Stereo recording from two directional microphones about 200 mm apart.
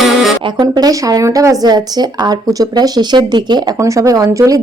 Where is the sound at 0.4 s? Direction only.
20° right (ahead or behind).